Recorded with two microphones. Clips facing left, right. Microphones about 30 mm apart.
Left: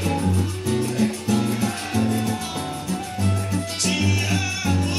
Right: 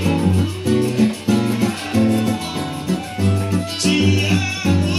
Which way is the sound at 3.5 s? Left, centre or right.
Right.